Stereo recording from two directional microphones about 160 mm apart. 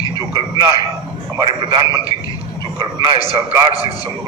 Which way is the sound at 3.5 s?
30° right (ahead or behind).